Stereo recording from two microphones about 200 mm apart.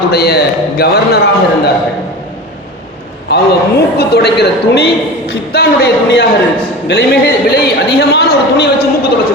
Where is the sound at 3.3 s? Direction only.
55° left (ahead or behind).